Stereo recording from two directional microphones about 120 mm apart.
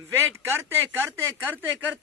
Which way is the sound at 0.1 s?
20° right (ahead or behind).